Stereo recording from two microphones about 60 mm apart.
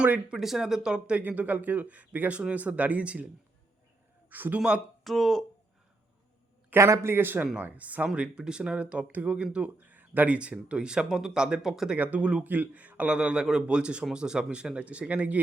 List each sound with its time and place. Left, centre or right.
0.0 s speech: right
0.3 s speech: centre; by 3.2 s right
4.3 s speech: right
5.0 s speech: centre
6.7 s a man's voice: right
7.5 s speech: right
9.6 s speech: right; by 11.9 s centre
11.9 s speech: right